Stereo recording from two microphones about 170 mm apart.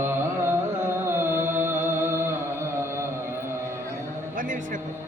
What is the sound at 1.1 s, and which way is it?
Music, 15° right (ahead or behind).